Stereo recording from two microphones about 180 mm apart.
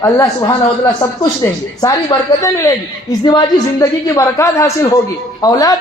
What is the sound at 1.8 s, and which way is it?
A woman's voice, 20° left (ahead or behind).